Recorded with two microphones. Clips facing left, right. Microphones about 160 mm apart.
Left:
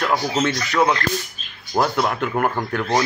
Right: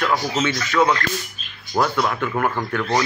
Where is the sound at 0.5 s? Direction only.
30° left (ahead or behind).